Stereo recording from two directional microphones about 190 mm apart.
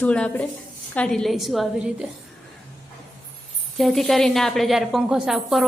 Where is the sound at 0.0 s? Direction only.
5° left (ahead or behind).